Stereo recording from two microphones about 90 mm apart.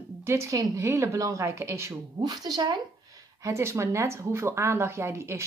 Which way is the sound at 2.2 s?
50° right (ahead or behind).